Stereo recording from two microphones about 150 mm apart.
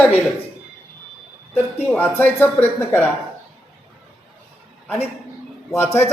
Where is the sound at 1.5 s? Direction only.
10° left (ahead or behind).